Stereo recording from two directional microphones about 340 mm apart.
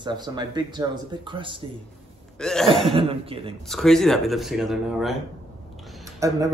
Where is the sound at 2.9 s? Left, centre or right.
Centre.